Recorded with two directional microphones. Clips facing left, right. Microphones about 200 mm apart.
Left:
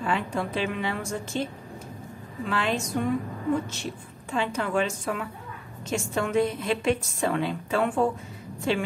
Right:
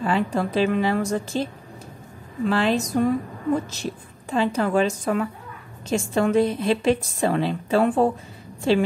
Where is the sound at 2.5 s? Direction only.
35° right (ahead or behind).